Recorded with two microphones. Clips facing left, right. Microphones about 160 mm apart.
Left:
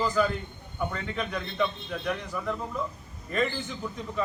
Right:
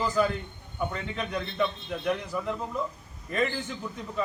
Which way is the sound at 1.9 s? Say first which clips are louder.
Right 2 dB; 10° right (ahead or behind).